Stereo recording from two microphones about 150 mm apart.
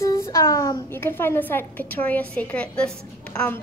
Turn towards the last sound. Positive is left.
turn(degrees=10)  # may be behind; listen again after turning